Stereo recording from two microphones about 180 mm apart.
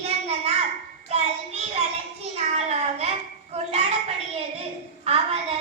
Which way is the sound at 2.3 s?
35° right (ahead or behind).